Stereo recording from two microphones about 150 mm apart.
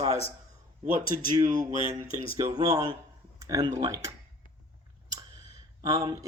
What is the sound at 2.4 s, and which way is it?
Speech, 25° right (ahead or behind).